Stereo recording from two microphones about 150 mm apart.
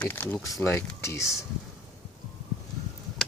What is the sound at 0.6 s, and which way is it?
Speech, 15° left (ahead or behind).